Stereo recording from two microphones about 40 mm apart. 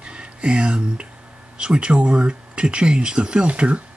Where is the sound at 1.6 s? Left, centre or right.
Right.